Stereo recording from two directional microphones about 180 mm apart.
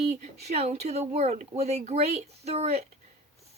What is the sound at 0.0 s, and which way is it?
Speech, 35° right (ahead or behind).